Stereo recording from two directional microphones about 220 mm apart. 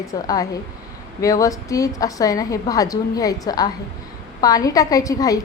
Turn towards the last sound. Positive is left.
turn(degrees=15)  # may be behind; listen again after turning